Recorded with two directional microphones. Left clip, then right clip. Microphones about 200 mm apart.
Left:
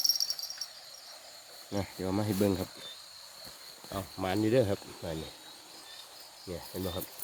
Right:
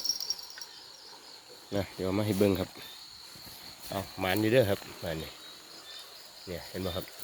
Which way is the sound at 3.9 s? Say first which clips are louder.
Right 3 dB; centre (ahead or behind).